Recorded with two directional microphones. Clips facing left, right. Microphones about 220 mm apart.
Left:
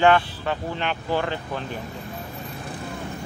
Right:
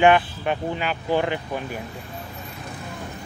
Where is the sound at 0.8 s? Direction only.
5° right (ahead or behind).